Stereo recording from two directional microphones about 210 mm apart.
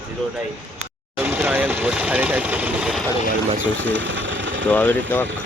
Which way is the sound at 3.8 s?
65° right (ahead or behind).